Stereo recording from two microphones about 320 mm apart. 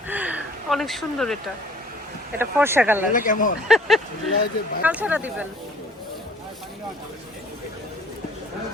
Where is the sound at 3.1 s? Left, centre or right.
Left.